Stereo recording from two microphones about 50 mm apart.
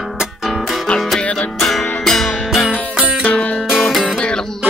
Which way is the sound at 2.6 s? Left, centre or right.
Left.